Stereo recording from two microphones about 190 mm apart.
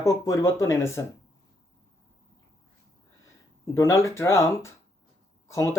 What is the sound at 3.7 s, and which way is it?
Speech, 15° left (ahead or behind).